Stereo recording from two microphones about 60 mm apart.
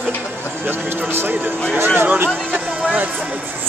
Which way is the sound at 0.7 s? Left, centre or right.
Right.